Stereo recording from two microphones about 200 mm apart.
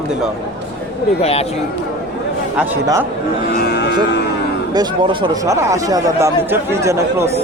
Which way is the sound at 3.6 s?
55° left (ahead or behind).